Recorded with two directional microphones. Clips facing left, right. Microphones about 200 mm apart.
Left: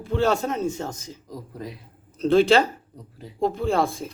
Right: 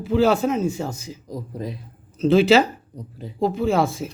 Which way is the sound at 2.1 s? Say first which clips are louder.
Right 2 dB; centre (ahead or behind).